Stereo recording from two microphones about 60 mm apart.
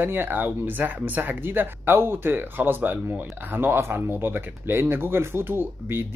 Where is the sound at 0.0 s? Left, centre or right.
Right.